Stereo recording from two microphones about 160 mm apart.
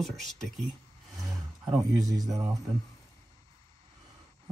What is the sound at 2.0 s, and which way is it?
Speech, 20° right (ahead or behind).